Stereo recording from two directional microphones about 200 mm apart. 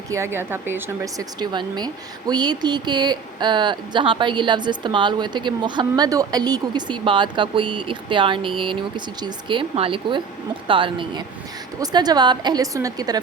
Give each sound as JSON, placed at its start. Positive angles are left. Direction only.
{"t": 0.1, "sound": "speech", "side_deg": -10}